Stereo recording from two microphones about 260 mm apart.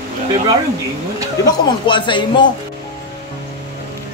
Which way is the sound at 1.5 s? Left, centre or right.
Centre.